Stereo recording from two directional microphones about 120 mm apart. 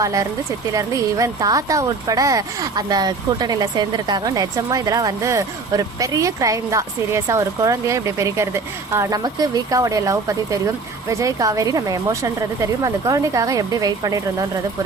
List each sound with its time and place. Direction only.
0.0 s speech: 30° right (ahead or behind)